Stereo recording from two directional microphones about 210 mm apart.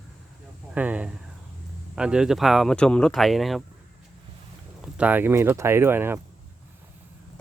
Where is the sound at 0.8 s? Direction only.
5° right (ahead or behind).